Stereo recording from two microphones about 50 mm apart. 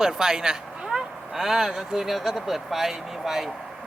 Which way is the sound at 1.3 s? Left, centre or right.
Centre.